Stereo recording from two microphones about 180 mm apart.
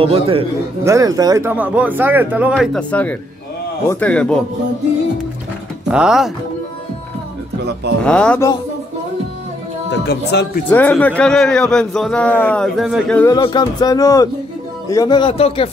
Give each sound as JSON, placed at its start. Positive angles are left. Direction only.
{"t": 0.0, "sound": "a man's voice", "side_deg": -30}
{"t": 0.8, "sound": "speech", "side_deg": -20}
{"t": 2.9, "sound": "a man's voice", "side_deg": 10}
{"t": 5.9, "sound": "a man's voice", "side_deg": -5}
{"t": 8.0, "sound": "a man's voice", "side_deg": 5}
{"t": 9.8, "sound": "speech", "side_deg": 70}
{"t": 10.7, "sound": "a man's voice", "side_deg": 10}
{"t": 13.2, "sound": "speech", "side_deg": 20}